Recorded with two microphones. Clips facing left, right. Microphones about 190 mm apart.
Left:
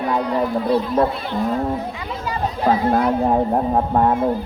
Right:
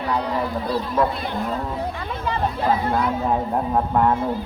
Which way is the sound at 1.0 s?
40° left (ahead or behind).